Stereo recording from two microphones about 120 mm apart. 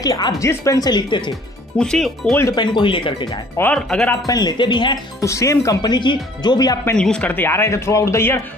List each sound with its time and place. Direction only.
0.0 s speech: 30° left (ahead or behind)
1.3 s speech: 5° left (ahead or behind)
2.5 s speech: 40° left (ahead or behind)
3.7 s speech: 5° left (ahead or behind)
4.3 s speech: 35° left (ahead or behind)
5.2 s speech: 25° left (ahead or behind)
6.8 s speech: 10° left (ahead or behind)